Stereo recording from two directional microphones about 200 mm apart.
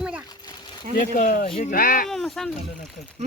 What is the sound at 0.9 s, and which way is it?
Speech, 45° left (ahead or behind).